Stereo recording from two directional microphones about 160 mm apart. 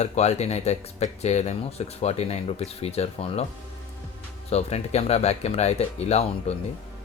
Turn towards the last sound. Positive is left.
turn(degrees=40)  # may be behind; listen again after turning